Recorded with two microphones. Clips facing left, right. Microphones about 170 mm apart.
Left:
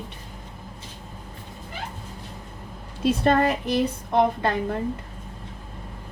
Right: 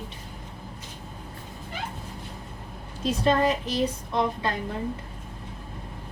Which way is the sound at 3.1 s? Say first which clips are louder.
Left 2 dB; 60° left (ahead or behind).